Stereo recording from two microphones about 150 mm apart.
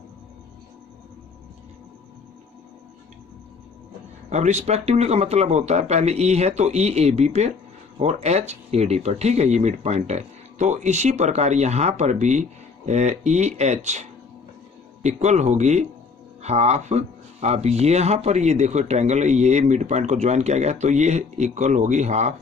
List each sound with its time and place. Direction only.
4.3 s speech: 50° right (ahead or behind)
15.0 s speech: 45° right (ahead or behind)